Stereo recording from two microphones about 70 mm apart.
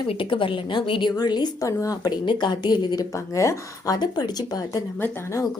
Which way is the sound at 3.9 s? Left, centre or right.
Left.